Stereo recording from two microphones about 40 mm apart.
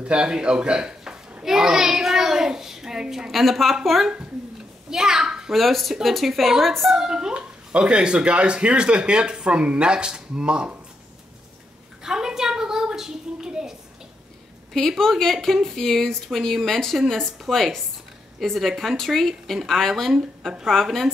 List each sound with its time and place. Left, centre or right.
0.0 s a man's voice: right
3.3 s speech: centre
4.8 s a sound: centre
5.5 s speech: centre
7.0 s a woman's voice: centre
12.0 s a sound: centre
14.7 s speech: centre